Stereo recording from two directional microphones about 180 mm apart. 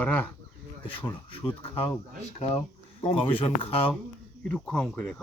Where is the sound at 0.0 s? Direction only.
10° left (ahead or behind).